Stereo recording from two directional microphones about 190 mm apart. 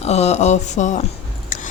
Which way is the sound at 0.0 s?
35° left (ahead or behind).